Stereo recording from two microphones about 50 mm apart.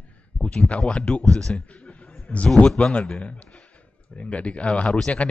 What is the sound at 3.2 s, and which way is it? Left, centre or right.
A man's voice, left.